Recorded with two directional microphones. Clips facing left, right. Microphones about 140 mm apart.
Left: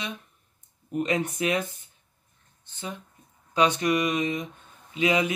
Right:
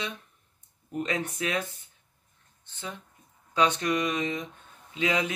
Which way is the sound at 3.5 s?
15° left (ahead or behind).